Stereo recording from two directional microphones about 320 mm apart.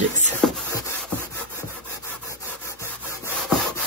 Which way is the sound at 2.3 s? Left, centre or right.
Centre.